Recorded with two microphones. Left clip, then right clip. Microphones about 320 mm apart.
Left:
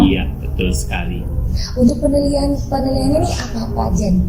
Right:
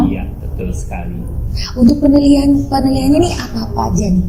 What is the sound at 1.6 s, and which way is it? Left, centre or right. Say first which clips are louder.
A woman's voice: right 4 dB; right.